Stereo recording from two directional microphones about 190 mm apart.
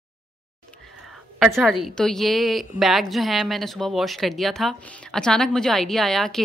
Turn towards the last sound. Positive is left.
turn(degrees=0)  # may be behind; listen again after turning